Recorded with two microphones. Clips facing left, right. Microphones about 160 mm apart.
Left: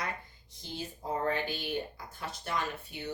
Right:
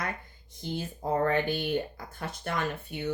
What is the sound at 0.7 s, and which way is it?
Speech, 55° right (ahead or behind).